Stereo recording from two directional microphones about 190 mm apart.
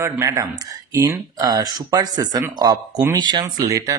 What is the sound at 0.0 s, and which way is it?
Speech, 15° right (ahead or behind).